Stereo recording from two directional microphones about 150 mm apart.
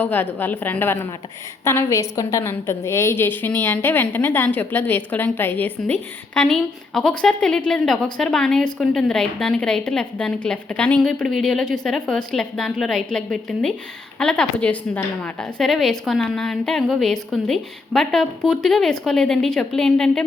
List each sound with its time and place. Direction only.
0.0 s a woman's voice: 10° left (ahead or behind)